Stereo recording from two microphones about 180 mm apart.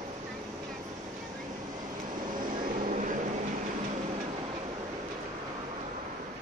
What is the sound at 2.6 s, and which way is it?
Vehicle, 45° right (ahead or behind).